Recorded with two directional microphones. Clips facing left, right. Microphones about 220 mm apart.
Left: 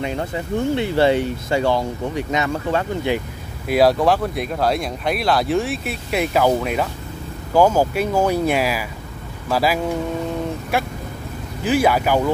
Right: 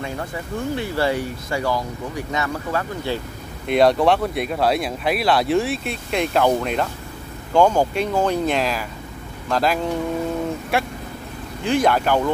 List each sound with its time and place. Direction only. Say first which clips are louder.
0.0 s speech: left 4 dB; 20° left (ahead or behind)
3.6 s speech: even; 5° left (ahead or behind)